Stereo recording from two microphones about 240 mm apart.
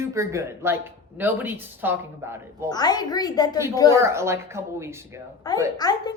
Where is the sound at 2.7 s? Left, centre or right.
Centre.